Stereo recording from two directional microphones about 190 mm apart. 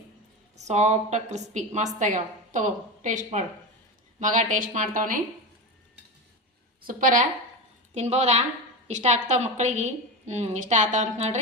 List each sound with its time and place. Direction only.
0.5 s a woman's voice: 35° right (ahead or behind)
6.8 s a woman's voice: 45° right (ahead or behind)